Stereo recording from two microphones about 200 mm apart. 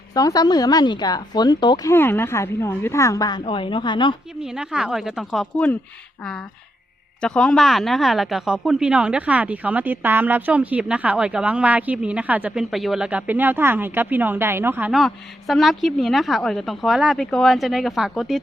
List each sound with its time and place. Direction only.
0.1 s speech: 20° left (ahead or behind)
4.4 s speech: 5° right (ahead or behind)
7.2 s speech: 5° left (ahead or behind)